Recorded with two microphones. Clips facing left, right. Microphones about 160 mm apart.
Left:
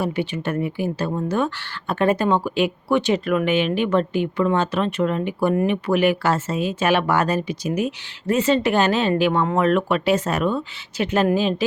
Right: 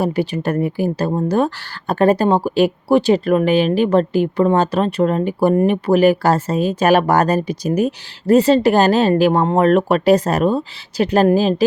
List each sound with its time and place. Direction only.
0.0 s speech: 40° right (ahead or behind)